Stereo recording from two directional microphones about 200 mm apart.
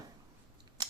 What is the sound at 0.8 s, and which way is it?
Scissors, 20° right (ahead or behind).